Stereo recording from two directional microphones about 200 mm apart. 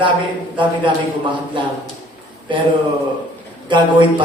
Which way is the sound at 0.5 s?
25° right (ahead or behind).